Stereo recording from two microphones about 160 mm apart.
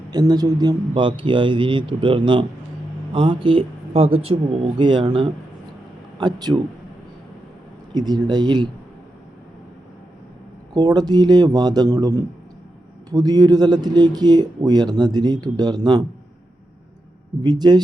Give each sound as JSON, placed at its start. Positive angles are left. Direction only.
{"t": 0.1, "sound": "a man's voice", "side_deg": -25}
{"t": 7.9, "sound": "a man's voice", "side_deg": -25}
{"t": 10.8, "sound": "a man's voice", "side_deg": -25}
{"t": 17.4, "sound": "a man's voice", "side_deg": -25}